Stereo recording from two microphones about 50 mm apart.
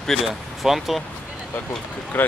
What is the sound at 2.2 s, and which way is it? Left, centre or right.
Speech, left.